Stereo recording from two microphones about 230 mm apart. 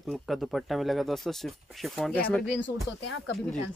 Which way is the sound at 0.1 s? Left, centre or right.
Centre.